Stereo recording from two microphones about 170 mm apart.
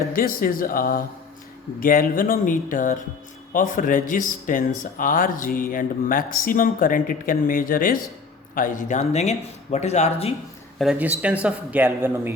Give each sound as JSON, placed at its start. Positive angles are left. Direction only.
{"t": 0.1, "sound": "speech", "side_deg": 55}
{"t": 10.8, "sound": "speech", "side_deg": -5}